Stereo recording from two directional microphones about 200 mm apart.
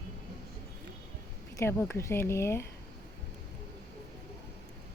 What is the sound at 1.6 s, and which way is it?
A woman's voice, 15° left (ahead or behind).